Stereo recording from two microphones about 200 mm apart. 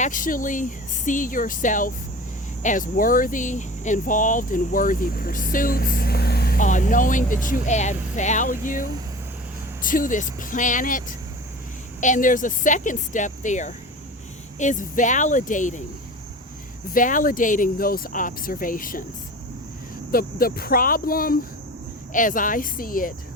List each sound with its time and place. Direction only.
0.0 s speech: 40° left (ahead or behind)
9.8 s speech: 40° left (ahead or behind)
16.9 s speech: 40° left (ahead or behind)
20.1 s speech: 50° left (ahead or behind)